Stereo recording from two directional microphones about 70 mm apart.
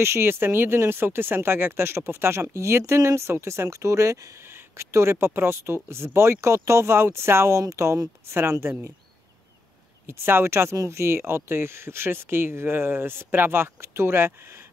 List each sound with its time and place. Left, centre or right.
0.0 s speech: right
10.0 s speech: right